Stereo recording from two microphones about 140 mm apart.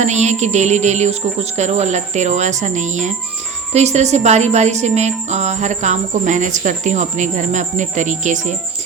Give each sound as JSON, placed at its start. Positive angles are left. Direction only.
{"t": 0.0, "sound": "speech", "side_deg": -55}